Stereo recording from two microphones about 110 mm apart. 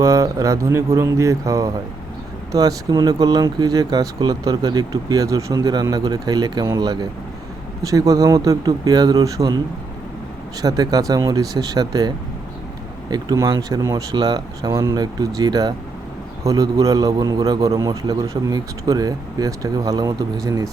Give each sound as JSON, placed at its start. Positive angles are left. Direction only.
{"t": 0.0, "sound": "speech", "side_deg": -30}
{"t": 10.6, "sound": "speech", "side_deg": -35}